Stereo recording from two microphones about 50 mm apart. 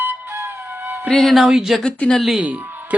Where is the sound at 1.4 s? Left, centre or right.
Centre.